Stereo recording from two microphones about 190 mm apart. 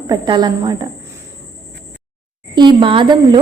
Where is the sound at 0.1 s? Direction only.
20° right (ahead or behind).